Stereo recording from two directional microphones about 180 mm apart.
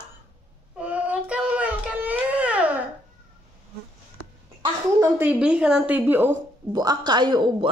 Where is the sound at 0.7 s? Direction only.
5° right (ahead or behind).